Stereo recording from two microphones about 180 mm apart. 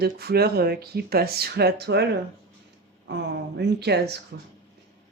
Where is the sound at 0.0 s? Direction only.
60° right (ahead or behind).